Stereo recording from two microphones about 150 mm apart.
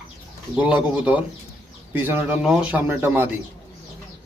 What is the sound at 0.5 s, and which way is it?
Speech, 10° right (ahead or behind).